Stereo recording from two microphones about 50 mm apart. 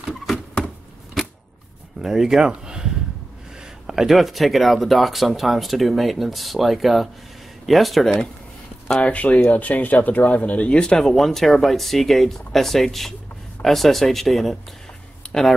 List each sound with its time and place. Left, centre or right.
2.0 s speech: centre
8.8 s speech: left; by 14.6 s centre
15.2 s a sound: centre